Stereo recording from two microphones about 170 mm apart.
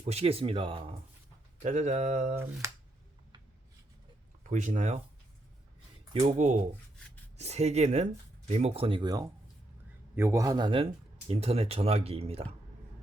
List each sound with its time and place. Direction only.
0.0 s speech: 40° right (ahead or behind)
1.5 s speech: 45° right (ahead or behind)
4.4 s speech: 45° right (ahead or behind)
6.1 s a man's voice: 40° right (ahead or behind)